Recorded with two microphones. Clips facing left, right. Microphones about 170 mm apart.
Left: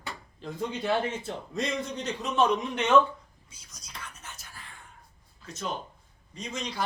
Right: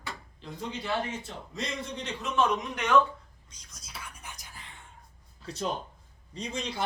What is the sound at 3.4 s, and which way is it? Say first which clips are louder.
Whispering: even; 5° left (ahead or behind).